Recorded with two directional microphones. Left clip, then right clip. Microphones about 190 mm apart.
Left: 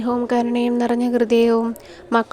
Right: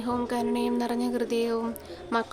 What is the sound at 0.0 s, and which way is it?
A woman's voice, 40° left (ahead or behind).